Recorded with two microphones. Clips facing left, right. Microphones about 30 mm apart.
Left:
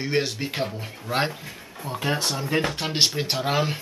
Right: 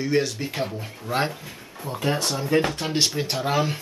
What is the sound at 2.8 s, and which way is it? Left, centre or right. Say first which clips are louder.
Speech: left 1 dB; left.